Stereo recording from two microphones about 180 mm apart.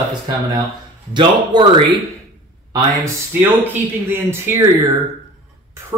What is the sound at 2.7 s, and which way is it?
A man's voice, 15° right (ahead or behind).